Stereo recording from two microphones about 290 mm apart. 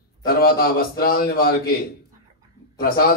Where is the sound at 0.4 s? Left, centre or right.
Left.